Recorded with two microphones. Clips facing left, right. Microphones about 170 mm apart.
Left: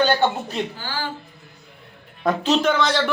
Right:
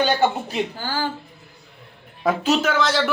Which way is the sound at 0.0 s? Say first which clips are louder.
Even; 10° right (ahead or behind).